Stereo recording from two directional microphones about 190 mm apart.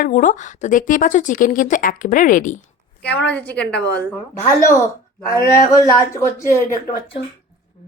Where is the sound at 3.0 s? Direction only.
60° left (ahead or behind).